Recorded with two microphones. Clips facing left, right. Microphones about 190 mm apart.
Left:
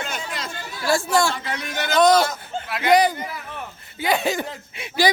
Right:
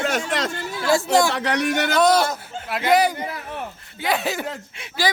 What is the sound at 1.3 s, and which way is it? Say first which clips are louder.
Speech: right 7 dB; 75° right (ahead or behind).